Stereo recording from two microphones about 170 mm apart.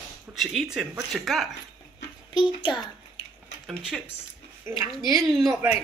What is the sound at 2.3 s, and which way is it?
Speech, 25° left (ahead or behind).